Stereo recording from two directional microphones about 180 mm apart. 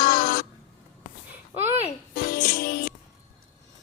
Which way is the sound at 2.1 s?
50° left (ahead or behind).